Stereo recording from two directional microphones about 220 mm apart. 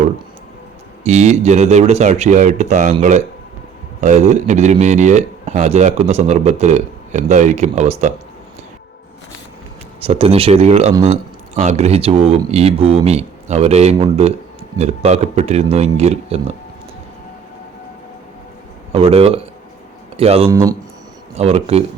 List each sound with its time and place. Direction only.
1.0 s speech: 30° right (ahead or behind)
10.0 s speech: 25° right (ahead or behind)
18.9 s speech: 25° right (ahead or behind)
20.5 s speech: 15° right (ahead or behind)
21.3 s speech: 25° right (ahead or behind)